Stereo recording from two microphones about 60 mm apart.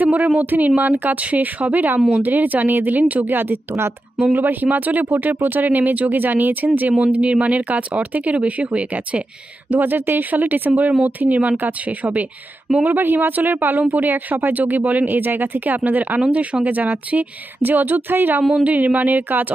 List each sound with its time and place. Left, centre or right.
0.0 s speech: right
2.0 s speech: centre
2.2 s speech: right
9.7 s speech: right
16.2 s speech: centre